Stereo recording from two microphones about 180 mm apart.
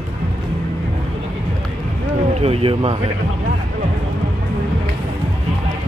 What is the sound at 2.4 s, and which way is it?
Speech, 30° right (ahead or behind).